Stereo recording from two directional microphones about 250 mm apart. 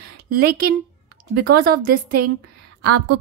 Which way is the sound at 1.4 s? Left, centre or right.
Right.